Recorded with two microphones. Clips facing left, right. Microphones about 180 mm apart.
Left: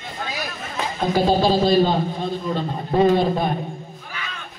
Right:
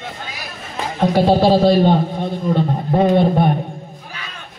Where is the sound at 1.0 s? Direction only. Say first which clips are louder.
Right 5 dB; 70° right (ahead or behind).